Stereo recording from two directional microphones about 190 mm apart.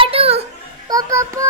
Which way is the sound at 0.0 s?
30° right (ahead or behind).